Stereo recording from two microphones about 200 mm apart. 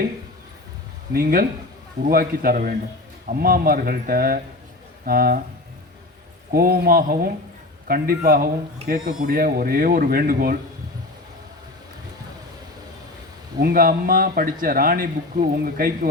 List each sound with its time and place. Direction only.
1.1 s speech: 45° right (ahead or behind)
6.5 s speech: 50° right (ahead or behind)
13.6 s speech: 45° right (ahead or behind)